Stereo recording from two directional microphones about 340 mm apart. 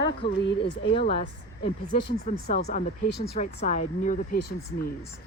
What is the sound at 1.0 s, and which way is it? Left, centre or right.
Speech, centre.